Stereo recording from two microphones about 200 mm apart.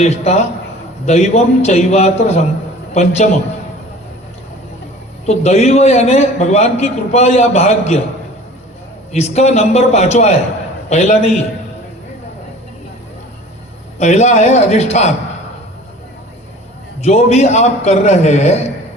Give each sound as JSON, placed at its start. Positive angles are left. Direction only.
{"t": 0.0, "sound": "a man's voice", "side_deg": 35}
{"t": 5.2, "sound": "a man's voice", "side_deg": 35}
{"t": 9.1, "sound": "a man's voice", "side_deg": 35}
{"t": 14.0, "sound": "a man's voice", "side_deg": 35}
{"t": 17.0, "sound": "a man's voice", "side_deg": 30}